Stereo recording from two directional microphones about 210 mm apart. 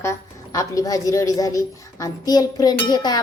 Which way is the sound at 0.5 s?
15° left (ahead or behind).